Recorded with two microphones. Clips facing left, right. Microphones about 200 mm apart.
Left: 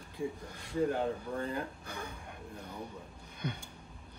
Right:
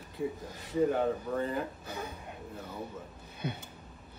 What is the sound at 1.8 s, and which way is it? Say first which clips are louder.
Speech: right 3 dB; 20° right (ahead or behind).